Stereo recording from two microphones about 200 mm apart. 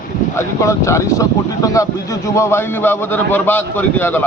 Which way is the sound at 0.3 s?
15° left (ahead or behind).